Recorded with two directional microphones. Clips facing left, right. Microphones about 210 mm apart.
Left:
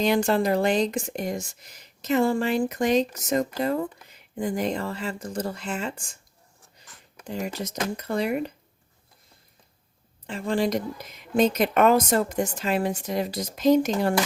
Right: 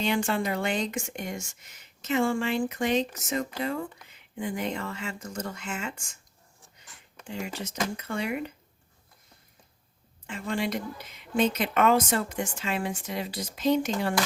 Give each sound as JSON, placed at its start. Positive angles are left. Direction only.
{"t": 0.0, "sound": "speech", "side_deg": 40}
{"t": 7.3, "sound": "speech", "side_deg": 40}
{"t": 10.2, "sound": "speech", "side_deg": 35}